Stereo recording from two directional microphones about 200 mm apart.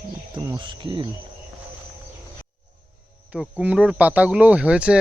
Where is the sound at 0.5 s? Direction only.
25° right (ahead or behind).